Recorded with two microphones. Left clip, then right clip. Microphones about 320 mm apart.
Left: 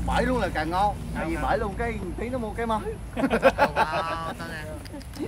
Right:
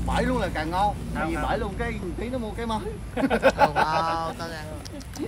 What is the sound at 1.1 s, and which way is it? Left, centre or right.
Speech, right.